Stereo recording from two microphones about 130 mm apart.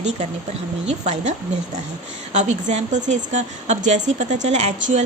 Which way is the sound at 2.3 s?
65° right (ahead or behind).